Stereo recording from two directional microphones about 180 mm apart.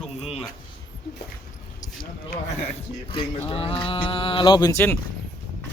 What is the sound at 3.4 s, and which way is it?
Speech, 30° left (ahead or behind).